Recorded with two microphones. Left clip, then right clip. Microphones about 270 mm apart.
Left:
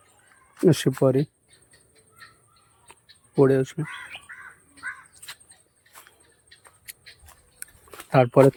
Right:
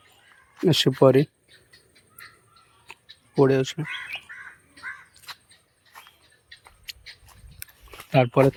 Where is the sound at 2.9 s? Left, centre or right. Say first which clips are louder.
Even; centre.